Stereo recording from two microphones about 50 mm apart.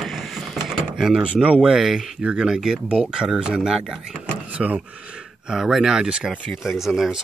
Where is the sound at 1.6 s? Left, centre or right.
Centre.